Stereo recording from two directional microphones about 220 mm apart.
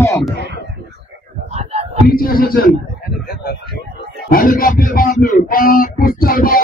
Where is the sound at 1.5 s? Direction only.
30° right (ahead or behind).